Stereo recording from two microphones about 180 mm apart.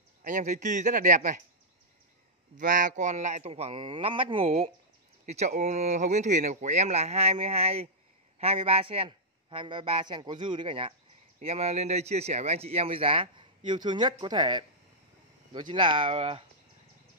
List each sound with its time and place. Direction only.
0.2 s a man's voice: 45° right (ahead or behind)
2.5 s a man's voice: 45° right (ahead or behind)